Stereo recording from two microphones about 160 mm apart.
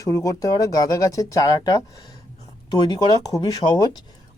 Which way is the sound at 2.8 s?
25° left (ahead or behind).